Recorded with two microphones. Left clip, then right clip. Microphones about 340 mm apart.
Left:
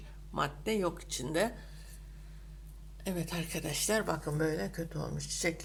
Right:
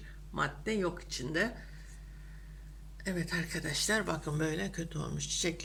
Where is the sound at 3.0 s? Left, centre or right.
Centre.